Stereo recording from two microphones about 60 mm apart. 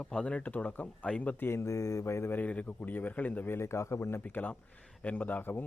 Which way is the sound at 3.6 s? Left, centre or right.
Left.